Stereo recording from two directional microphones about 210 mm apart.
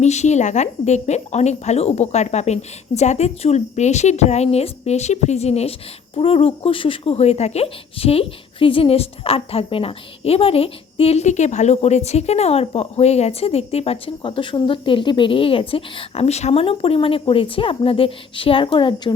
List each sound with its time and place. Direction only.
0.0 s speech: 35° left (ahead or behind)